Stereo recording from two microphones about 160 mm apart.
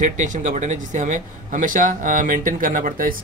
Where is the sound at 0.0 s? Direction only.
50° right (ahead or behind).